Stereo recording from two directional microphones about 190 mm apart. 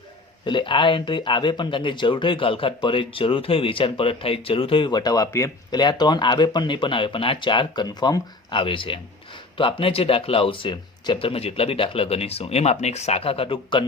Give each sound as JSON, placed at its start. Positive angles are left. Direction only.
{"t": 0.4, "sound": "speech", "side_deg": 25}